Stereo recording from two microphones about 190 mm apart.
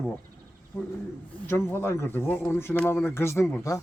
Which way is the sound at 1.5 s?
10° left (ahead or behind).